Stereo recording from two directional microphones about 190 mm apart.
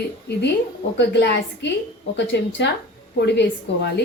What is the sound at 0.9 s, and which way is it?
A woman's voice, 65° left (ahead or behind).